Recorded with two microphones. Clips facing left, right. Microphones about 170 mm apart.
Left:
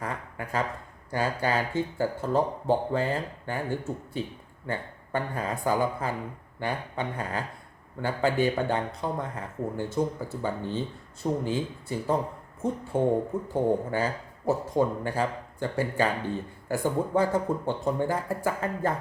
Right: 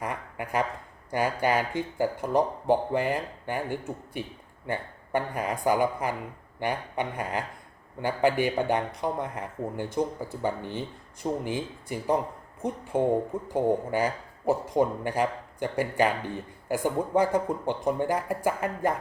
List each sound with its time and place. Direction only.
0.0 s a man's voice: 15° right (ahead or behind)